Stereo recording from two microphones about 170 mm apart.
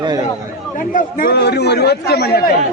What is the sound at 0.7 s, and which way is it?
A man's voice, 50° left (ahead or behind).